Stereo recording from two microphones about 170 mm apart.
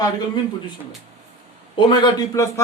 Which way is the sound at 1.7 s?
25° left (ahead or behind).